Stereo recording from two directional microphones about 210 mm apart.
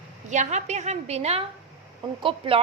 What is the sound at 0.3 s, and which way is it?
A woman's voice, 35° right (ahead or behind).